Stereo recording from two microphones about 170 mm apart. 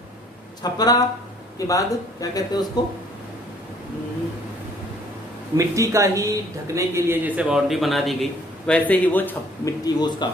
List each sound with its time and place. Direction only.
0.6 s a man's voice: 25° left (ahead or behind)
5.5 s speech: 20° right (ahead or behind); by 9.7 s 10° left (ahead or behind)
9.8 s a man's voice: 25° left (ahead or behind)